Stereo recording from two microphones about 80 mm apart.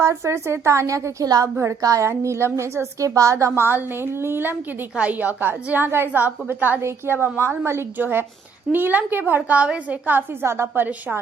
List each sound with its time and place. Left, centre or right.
0.0 s a woman's voice: right
4.9 s a woman's voice: centre